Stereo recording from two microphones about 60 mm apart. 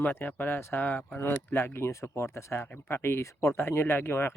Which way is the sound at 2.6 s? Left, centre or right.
Left.